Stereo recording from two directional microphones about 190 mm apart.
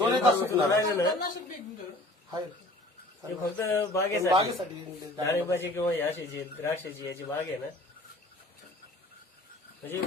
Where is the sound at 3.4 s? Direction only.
15° left (ahead or behind).